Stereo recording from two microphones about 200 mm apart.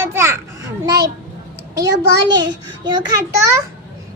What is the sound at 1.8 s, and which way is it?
Speech, 60° right (ahead or behind).